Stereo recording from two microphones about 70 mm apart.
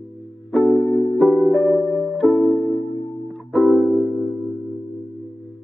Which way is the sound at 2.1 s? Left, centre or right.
Centre.